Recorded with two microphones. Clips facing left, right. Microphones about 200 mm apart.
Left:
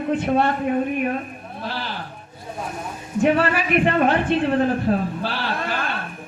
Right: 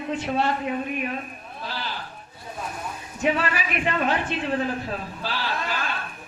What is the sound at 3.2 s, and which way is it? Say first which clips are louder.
Speech: left 5 dB; 55° left (ahead or behind).